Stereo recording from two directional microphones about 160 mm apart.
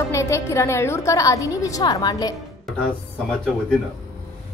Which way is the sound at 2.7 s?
Centre (ahead or behind).